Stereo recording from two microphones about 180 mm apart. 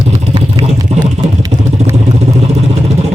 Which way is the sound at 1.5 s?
40° right (ahead or behind).